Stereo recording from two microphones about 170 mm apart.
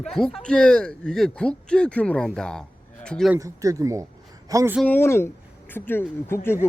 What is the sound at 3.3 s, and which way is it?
Speech, 20° right (ahead or behind).